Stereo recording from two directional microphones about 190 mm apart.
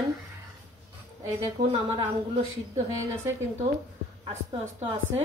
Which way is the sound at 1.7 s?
30° right (ahead or behind).